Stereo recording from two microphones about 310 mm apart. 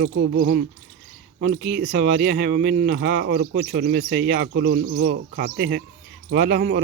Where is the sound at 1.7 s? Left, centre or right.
Right.